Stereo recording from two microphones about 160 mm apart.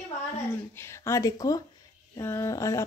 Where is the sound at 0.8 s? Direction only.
15° left (ahead or behind).